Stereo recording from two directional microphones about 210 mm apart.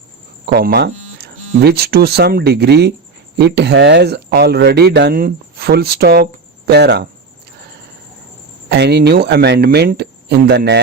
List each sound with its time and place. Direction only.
0.4 s speech: 50° right (ahead or behind)
8.7 s speech: 55° right (ahead or behind)